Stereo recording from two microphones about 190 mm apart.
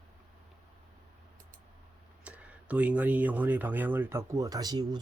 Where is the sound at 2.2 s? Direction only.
5° right (ahead or behind).